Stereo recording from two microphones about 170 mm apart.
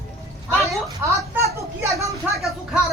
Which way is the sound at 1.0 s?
15° right (ahead or behind).